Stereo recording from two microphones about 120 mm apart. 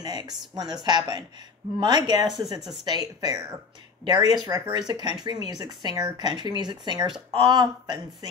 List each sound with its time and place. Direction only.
0.0 s speech: 35° right (ahead or behind)
2.2 s speech: centre (ahead or behind)
2.8 s speech: 35° right (ahead or behind)